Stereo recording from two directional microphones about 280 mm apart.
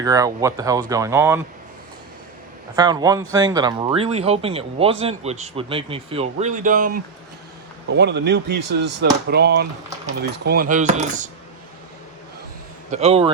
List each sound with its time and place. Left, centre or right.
0.0 s speech: centre
2.7 s speech: centre
12.9 s speech: right